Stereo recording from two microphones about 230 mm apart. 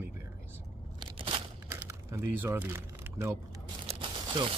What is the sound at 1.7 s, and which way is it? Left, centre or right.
Crumpling, centre.